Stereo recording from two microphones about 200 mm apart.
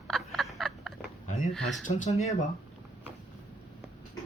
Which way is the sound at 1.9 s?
40° left (ahead or behind).